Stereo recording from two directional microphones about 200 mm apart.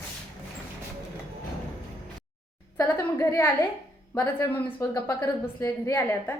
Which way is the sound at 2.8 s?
10° left (ahead or behind).